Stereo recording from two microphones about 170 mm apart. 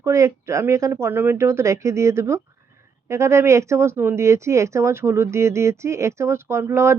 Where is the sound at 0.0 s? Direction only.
15° right (ahead or behind).